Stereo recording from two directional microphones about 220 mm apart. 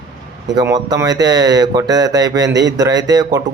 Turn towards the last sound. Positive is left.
turn(degrees=-15)  # may be behind; listen again after turning